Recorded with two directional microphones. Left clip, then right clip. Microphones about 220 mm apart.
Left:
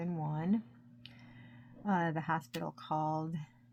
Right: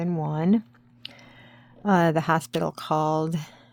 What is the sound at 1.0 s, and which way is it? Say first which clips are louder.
Speech: right 13 dB; 50° right (ahead or behind).